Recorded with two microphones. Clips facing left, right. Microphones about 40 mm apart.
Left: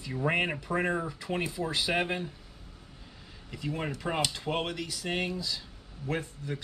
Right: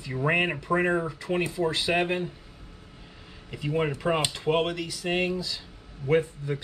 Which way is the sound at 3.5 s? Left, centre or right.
Centre.